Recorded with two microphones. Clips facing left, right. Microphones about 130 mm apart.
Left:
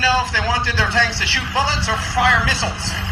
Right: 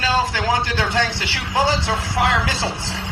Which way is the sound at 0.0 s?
20° right (ahead or behind).